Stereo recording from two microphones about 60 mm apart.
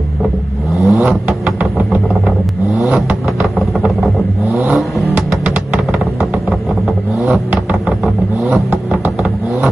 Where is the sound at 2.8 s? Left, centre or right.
Right.